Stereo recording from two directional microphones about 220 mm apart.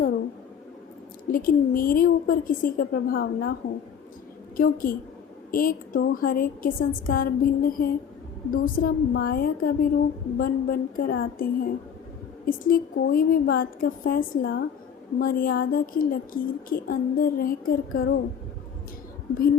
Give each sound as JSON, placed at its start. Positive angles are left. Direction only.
{"t": 1.3, "sound": "a woman's voice", "side_deg": 40}
{"t": 4.5, "sound": "a woman's voice", "side_deg": 40}